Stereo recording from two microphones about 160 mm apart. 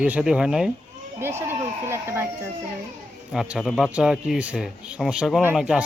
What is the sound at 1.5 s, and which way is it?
Speech, 15° right (ahead or behind).